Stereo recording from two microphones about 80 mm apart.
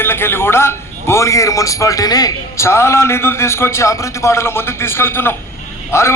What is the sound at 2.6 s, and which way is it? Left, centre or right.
A man's voice, left.